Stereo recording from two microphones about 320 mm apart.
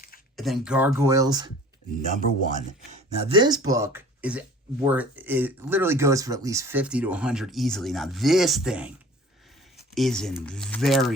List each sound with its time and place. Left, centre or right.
0.3 s speech: centre
2.0 s speech: right; by 8.9 s centre
9.9 s speech: centre